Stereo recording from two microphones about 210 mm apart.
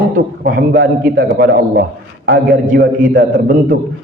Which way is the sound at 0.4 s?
45° right (ahead or behind).